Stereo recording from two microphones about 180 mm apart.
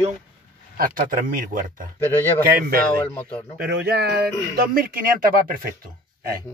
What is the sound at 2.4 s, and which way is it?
Speech, 55° right (ahead or behind).